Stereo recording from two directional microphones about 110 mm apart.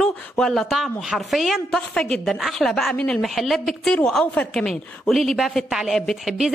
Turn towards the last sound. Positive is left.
turn(degrees=0)  # may be behind; listen again after turning